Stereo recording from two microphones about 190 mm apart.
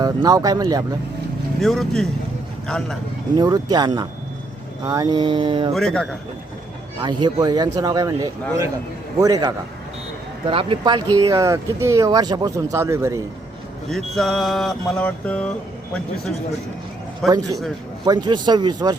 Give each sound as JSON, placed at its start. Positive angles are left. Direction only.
{"t": 0.0, "sound": "speech", "side_deg": -20}
{"t": 1.6, "sound": "mantra", "side_deg": 0}
{"t": 3.3, "sound": "speech", "side_deg": -20}
{"t": 5.7, "sound": "mantra", "side_deg": 5}
{"t": 7.0, "sound": "speech", "side_deg": -20}
{"t": 13.9, "sound": "mantra", "side_deg": 0}
{"t": 17.2, "sound": "speech", "side_deg": -20}